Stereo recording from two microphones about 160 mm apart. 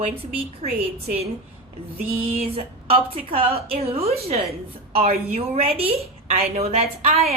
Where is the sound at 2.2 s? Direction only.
40° right (ahead or behind).